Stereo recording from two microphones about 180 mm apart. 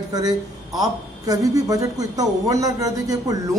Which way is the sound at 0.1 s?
20° right (ahead or behind).